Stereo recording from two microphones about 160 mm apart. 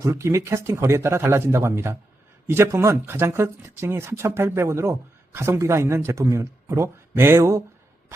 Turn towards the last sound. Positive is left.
turn(degrees=-20)  # may be behind; listen again after turning